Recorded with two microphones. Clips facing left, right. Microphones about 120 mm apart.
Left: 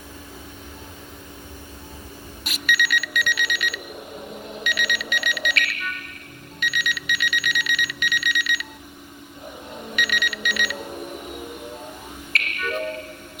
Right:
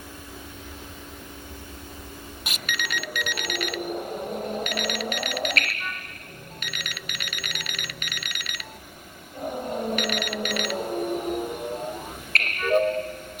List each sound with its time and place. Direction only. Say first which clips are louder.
3.0 s alarm clock: left 4 dB; 45° right (ahead or behind)
12.3 s music: right 6 dB; 45° right (ahead or behind)